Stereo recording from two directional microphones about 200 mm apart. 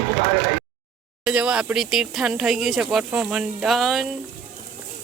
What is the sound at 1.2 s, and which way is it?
Speech, 5° right (ahead or behind).